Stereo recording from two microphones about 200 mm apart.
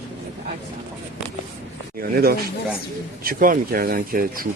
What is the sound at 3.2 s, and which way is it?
Speech, 45° right (ahead or behind).